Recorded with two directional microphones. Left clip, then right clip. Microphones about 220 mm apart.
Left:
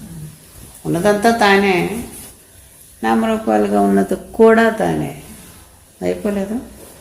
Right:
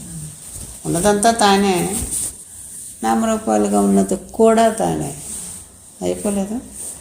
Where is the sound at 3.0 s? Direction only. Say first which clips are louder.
Left 1 dB; 30° right (ahead or behind).